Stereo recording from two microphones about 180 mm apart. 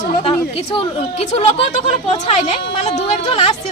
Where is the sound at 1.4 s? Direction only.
35° left (ahead or behind).